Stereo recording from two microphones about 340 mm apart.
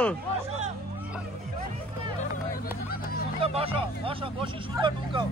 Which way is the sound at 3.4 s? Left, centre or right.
Centre.